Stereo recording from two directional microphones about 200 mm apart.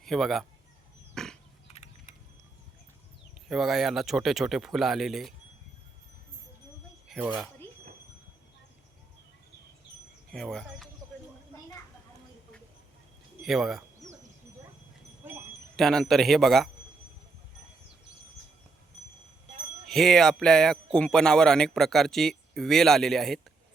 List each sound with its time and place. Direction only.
0.0 s speech: centre (ahead or behind)
1.1 s pig: centre (ahead or behind)
1.7 s a sound: 35° left (ahead or behind)
3.5 s speech: centre (ahead or behind)
7.1 s a sound: centre (ahead or behind)
10.3 s speech: centre (ahead or behind)
13.4 s speech: centre (ahead or behind)
15.7 s speech: centre (ahead or behind)
19.9 s speech: centre (ahead or behind)